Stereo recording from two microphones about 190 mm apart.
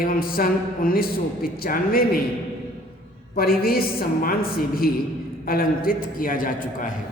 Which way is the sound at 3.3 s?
50° left (ahead or behind).